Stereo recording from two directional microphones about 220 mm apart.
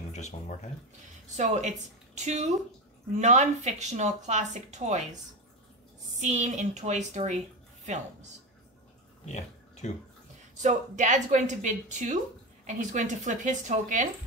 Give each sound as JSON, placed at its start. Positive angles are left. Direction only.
{"t": 0.1, "sound": "speech", "side_deg": 30}
{"t": 1.3, "sound": "a woman's voice", "side_deg": -30}
{"t": 6.1, "sound": "a woman's voice", "side_deg": -30}
{"t": 9.2, "sound": "pig", "side_deg": 30}
{"t": 10.6, "sound": "a woman's voice", "side_deg": -35}